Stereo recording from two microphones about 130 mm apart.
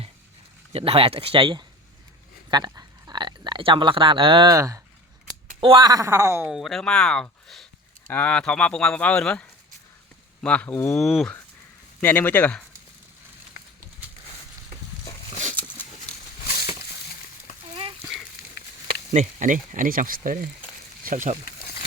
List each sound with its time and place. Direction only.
0.7 s speech: 50° right (ahead or behind)
2.5 s a sound: 30° right (ahead or behind)
4.5 s speech: 25° right (ahead or behind)
5.5 s speech: 40° right (ahead or behind)
5.9 s speech: 25° right (ahead or behind)
6.5 s speech: centre (ahead or behind)
8.0 s speech: 15° left (ahead or behind)
10.9 s speech: centre (ahead or behind)
11.9 s speech: 15° left (ahead or behind)
19.1 s speech: 75° right (ahead or behind)
19.7 s speech: 90° right